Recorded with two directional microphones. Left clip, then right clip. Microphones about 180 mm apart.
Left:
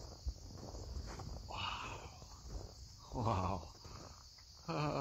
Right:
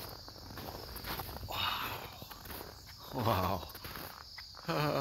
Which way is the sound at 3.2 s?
Centre (ahead or behind).